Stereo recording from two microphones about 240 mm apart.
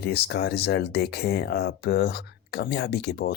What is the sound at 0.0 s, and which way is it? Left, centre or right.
Speech, left.